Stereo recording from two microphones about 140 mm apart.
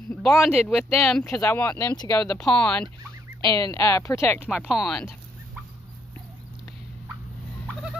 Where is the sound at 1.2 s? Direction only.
20° left (ahead or behind).